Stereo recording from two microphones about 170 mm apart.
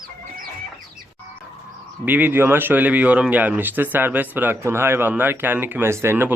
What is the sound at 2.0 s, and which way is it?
Speech, 10° right (ahead or behind).